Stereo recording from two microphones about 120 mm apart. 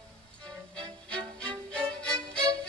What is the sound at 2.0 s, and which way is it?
Music, 10° left (ahead or behind).